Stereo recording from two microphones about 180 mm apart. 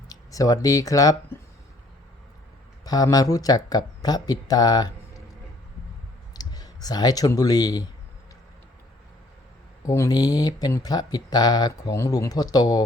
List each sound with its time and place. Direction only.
0.1 s speech: 20° left (ahead or behind)
2.8 s speech: 20° left (ahead or behind)
6.3 s speech: 20° left (ahead or behind)
9.8 s speech: 15° left (ahead or behind)